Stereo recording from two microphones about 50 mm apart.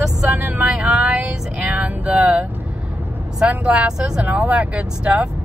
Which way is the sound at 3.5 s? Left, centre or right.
Centre.